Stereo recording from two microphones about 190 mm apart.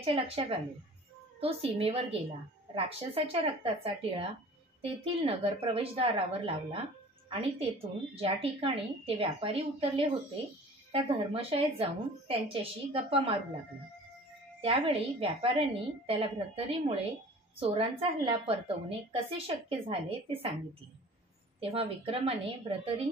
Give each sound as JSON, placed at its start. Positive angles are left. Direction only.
{"t": 0.0, "sound": "a woman's voice", "side_deg": -30}
{"t": 14.6, "sound": "a woman's voice", "side_deg": -30}
{"t": 21.5, "sound": "a woman's voice", "side_deg": -30}